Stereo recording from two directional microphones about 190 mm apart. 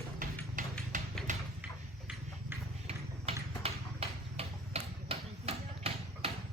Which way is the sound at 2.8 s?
30° right (ahead or behind).